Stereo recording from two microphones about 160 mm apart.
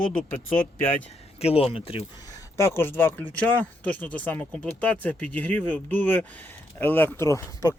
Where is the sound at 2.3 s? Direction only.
20° left (ahead or behind).